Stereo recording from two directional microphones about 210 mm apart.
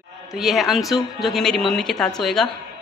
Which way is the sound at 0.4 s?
Centre (ahead or behind).